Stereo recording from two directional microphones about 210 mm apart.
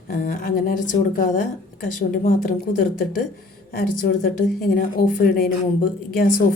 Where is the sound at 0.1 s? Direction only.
40° left (ahead or behind).